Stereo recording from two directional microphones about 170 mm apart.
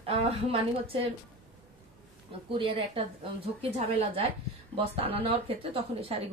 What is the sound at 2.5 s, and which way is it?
A woman's voice, 30° right (ahead or behind).